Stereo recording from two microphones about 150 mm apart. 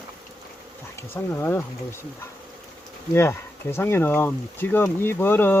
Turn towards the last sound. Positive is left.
turn(degrees=15)  # may be behind; listen again after turning